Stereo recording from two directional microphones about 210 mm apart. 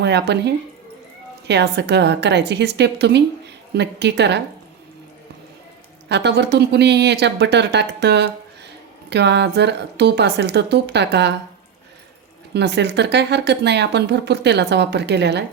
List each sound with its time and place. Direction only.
0.0 s speech: 55° right (ahead or behind)
6.1 s speech: 55° right (ahead or behind)
12.5 s speech: 55° right (ahead or behind)